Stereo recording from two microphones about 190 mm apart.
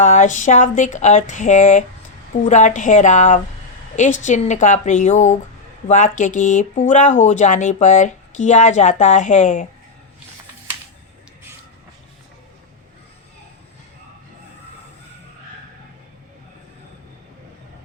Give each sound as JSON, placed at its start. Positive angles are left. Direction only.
{"t": 0.0, "sound": "speech", "side_deg": 40}